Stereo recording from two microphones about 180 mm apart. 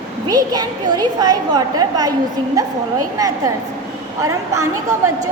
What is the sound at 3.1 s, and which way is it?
A woman's voice, 20° right (ahead or behind).